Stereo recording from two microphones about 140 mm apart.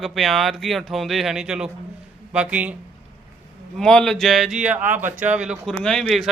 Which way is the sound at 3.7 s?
5° left (ahead or behind).